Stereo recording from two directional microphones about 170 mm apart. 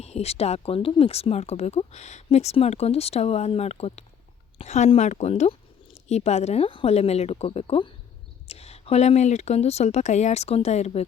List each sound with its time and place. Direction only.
0.0 s speech: 40° left (ahead or behind)